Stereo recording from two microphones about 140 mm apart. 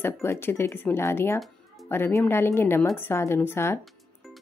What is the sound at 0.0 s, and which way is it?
Speech, 15° left (ahead or behind).